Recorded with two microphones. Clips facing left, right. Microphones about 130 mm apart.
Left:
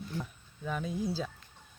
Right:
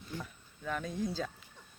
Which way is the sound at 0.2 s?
10° left (ahead or behind).